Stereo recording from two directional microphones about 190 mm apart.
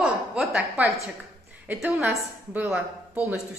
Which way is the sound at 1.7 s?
5° right (ahead or behind).